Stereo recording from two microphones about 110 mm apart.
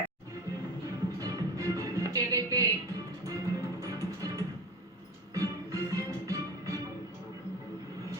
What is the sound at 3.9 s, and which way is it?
Music, 30° right (ahead or behind).